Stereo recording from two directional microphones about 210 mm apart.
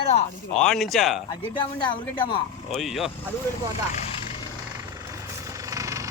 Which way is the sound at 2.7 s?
Centre (ahead or behind).